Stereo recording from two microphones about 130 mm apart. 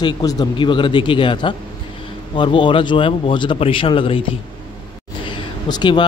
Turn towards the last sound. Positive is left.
turn(degrees=35)  # may be behind; listen again after turning